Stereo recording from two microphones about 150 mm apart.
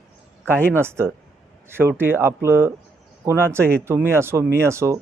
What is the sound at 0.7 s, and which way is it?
Speech, 15° right (ahead or behind).